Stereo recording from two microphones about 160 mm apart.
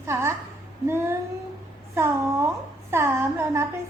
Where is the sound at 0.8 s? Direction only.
15° right (ahead or behind).